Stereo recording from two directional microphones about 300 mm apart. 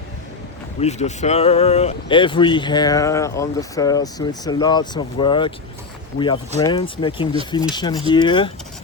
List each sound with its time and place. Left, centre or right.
0.8 s speech: left